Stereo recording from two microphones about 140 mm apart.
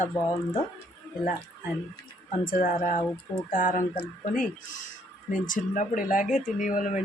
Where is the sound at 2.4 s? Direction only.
75° left (ahead or behind).